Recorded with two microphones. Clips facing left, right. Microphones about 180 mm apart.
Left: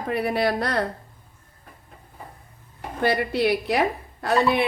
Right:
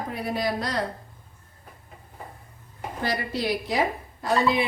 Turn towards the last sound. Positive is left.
turn(degrees=60)  # may be behind; listen again after turning